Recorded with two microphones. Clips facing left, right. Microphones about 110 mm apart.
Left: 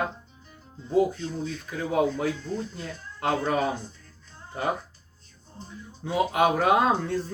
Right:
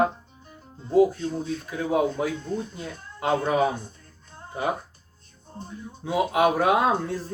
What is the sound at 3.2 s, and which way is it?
Speech, 15° right (ahead or behind).